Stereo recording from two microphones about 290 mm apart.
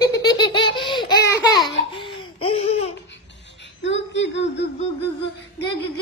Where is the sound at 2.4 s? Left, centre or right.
Centre.